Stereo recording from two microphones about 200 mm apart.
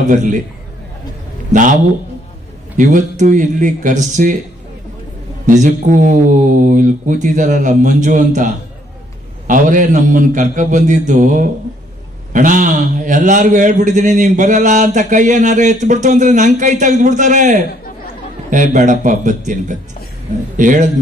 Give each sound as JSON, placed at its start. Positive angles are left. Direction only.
{"t": 0.1, "sound": "a man's voice", "side_deg": -40}
{"t": 1.5, "sound": "a man's voice", "side_deg": -40}
{"t": 2.8, "sound": "a man's voice", "side_deg": -40}
{"t": 5.5, "sound": "a man's voice", "side_deg": -40}